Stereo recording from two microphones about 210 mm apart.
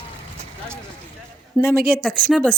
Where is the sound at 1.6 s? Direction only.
40° right (ahead or behind).